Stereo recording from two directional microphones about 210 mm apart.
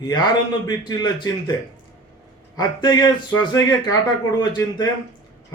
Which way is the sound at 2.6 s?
20° left (ahead or behind).